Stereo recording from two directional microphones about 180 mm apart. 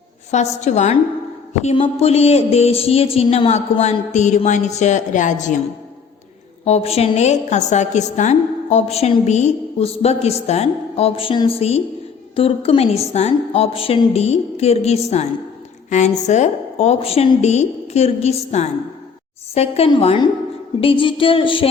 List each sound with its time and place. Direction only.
0.3 s a woman's voice: 40° left (ahead or behind)
6.7 s a woman's voice: 35° left (ahead or behind)